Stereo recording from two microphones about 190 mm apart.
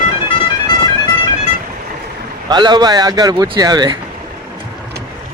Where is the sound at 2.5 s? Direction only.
20° right (ahead or behind).